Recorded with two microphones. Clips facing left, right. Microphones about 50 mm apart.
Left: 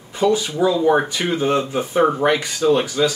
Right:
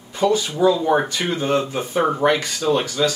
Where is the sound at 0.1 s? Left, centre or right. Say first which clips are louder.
Left 1 dB; centre.